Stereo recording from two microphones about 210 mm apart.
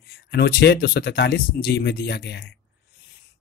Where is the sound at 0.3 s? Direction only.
50° left (ahead or behind).